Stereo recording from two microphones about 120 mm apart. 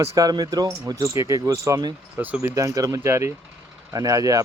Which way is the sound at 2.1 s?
15° right (ahead or behind).